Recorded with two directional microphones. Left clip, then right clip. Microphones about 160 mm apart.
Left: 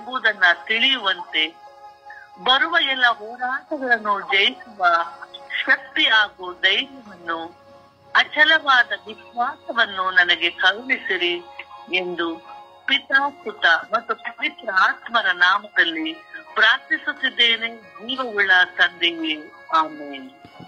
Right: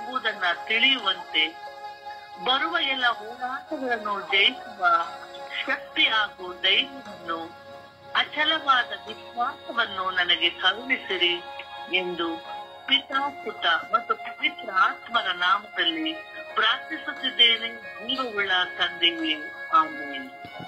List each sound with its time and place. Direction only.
0.0 s speech: 45° left (ahead or behind)
2.4 s a man's voice: 45° left (ahead or behind)